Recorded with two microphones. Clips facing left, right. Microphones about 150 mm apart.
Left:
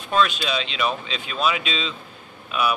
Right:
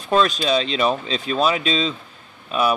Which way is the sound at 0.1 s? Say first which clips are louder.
Right 4 dB; 40° right (ahead or behind).